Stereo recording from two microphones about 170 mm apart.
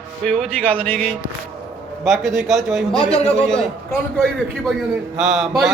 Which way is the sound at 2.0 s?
Centre (ahead or behind).